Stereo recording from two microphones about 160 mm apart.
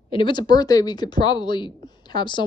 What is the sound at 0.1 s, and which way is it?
A woman's voice, 30° left (ahead or behind).